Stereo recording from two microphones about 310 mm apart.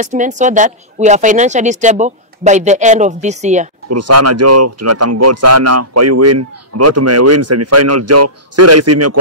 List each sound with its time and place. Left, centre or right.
0.0 s a woman's voice: right
3.9 s speech: right